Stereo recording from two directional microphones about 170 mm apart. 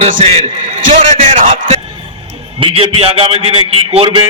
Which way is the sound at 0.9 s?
40° right (ahead or behind).